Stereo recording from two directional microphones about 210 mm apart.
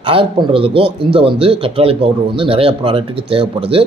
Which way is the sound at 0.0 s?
25° right (ahead or behind).